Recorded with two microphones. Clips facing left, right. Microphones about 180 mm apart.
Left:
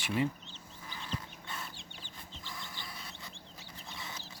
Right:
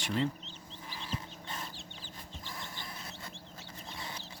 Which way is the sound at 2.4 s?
50° right (ahead or behind).